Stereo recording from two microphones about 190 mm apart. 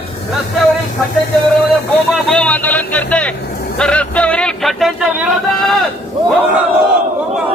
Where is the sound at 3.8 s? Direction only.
5° left (ahead or behind).